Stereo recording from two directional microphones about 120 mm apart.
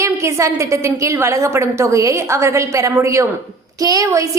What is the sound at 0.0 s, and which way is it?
A woman's voice, 25° right (ahead or behind).